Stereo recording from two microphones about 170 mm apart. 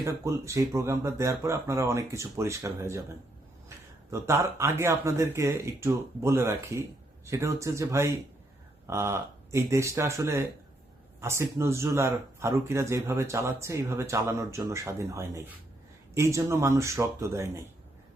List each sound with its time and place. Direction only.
0.0 s speech: 20° right (ahead or behind)
4.1 s speech: 15° right (ahead or behind)